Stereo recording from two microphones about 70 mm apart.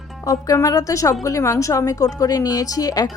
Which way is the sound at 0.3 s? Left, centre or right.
Left.